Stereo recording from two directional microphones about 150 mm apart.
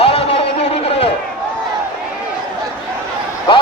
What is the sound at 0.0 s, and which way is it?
Music, 40° left (ahead or behind).